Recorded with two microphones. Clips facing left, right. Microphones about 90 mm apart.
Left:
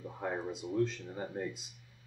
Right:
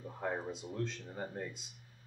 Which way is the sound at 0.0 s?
10° left (ahead or behind).